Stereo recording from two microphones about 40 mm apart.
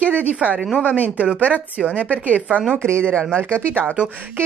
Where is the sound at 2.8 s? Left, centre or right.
Right.